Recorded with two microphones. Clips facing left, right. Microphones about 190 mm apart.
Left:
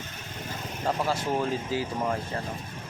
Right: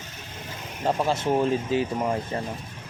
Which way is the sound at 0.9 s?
20° right (ahead or behind).